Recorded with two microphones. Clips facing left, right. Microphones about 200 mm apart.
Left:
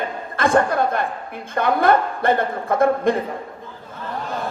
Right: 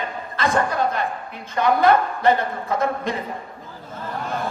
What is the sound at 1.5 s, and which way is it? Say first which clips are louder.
Speech: even; 55° left (ahead or behind).